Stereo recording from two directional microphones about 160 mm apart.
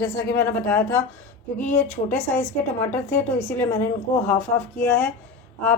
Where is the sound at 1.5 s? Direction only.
50° left (ahead or behind).